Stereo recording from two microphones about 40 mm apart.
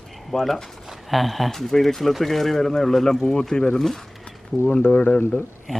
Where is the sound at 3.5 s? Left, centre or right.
Left.